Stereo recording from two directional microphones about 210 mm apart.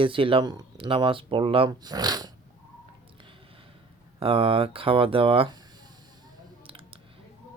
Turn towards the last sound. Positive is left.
turn(degrees=-25)  # may be behind; listen again after turning